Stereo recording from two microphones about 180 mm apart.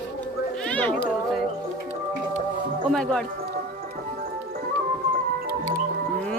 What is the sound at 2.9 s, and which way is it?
Speech, 5° left (ahead or behind).